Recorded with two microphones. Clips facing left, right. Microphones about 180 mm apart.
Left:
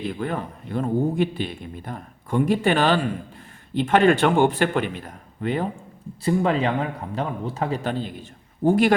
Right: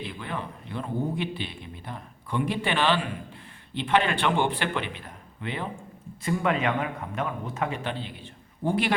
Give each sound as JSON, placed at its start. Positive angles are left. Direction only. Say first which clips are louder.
{"t": 0.0, "sound": "a man's voice", "louder": "left 7 dB", "side_deg": 45}
{"t": 6.2, "sound": "speech", "louder": "left 5 dB", "side_deg": 30}